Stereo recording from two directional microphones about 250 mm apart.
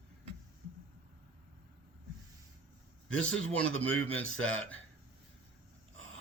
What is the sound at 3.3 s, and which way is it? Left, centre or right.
Speech, centre.